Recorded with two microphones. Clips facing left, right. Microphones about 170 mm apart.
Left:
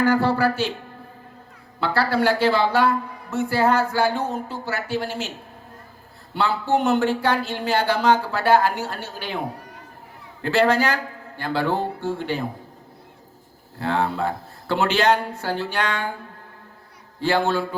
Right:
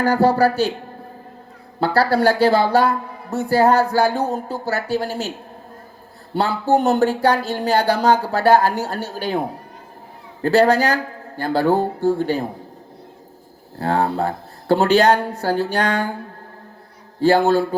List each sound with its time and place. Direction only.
0.0 s a woman's voice: 40° right (ahead or behind)
1.8 s a woman's voice: 40° right (ahead or behind)
6.3 s a woman's voice: 40° right (ahead or behind)
10.4 s a woman's voice: 40° right (ahead or behind)
13.7 s a woman's voice: 40° right (ahead or behind)
17.2 s a woman's voice: 40° right (ahead or behind)